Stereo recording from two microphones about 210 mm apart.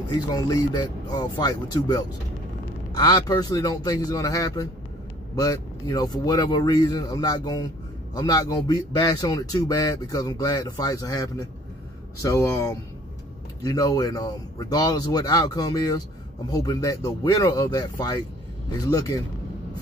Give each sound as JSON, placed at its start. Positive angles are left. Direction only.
{"t": 0.3, "sound": "speech", "side_deg": 20}